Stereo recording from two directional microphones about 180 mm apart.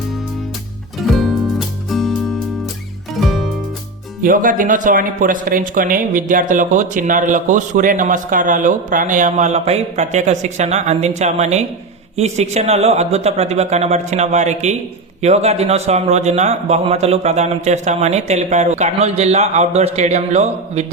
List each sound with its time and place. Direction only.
0.9 s music: centre (ahead or behind)
4.2 s a man's voice: 50° right (ahead or behind)